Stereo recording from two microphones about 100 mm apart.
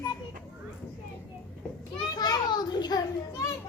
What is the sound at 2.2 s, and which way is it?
Speech, 45° left (ahead or behind).